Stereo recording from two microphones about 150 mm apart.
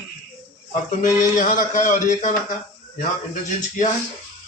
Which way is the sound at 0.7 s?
60° left (ahead or behind).